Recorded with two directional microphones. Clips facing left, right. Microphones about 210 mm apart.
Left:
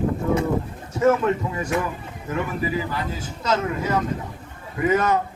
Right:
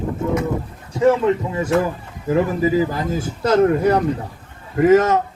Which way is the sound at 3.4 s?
60° right (ahead or behind).